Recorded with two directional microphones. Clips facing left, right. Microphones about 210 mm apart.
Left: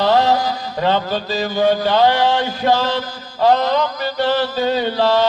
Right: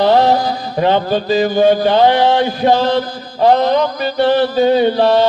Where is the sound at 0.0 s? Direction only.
15° right (ahead or behind).